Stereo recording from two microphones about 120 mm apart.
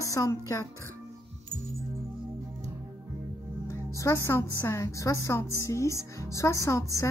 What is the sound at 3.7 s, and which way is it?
A woman's voice, 25° left (ahead or behind).